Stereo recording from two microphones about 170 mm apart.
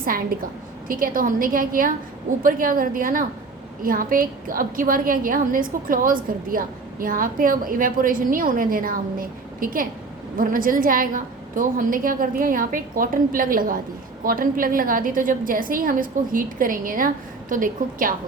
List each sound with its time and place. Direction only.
0.0 s a woman's voice: 55° right (ahead or behind)